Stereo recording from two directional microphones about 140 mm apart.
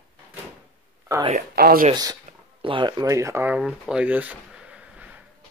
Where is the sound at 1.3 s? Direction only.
85° right.